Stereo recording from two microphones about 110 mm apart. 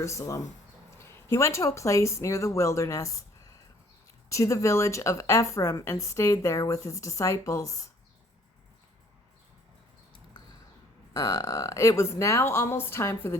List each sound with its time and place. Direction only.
0.0 s a woman's voice: 25° left (ahead or behind)
4.3 s a woman's voice: 30° left (ahead or behind)
11.1 s a woman's voice: 30° left (ahead or behind)